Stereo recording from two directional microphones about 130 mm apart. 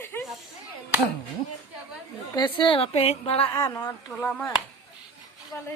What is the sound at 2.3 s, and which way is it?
A woman's voice, 35° left (ahead or behind).